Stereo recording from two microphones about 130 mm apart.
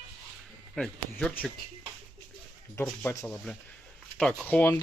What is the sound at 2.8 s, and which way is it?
Speech, 25° left (ahead or behind).